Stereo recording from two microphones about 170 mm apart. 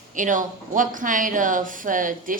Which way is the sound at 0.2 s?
50° right (ahead or behind).